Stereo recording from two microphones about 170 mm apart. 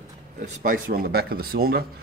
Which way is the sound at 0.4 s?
50° right (ahead or behind).